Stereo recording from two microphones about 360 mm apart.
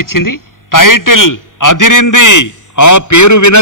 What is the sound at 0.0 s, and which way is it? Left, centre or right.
A man's voice, left.